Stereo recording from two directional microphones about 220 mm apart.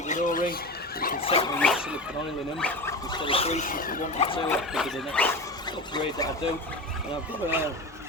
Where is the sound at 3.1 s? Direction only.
20° left (ahead or behind).